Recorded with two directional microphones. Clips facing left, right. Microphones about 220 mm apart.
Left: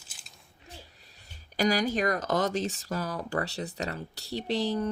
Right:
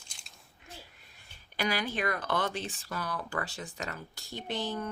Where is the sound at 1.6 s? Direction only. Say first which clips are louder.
Left 6 dB; 40° left (ahead or behind).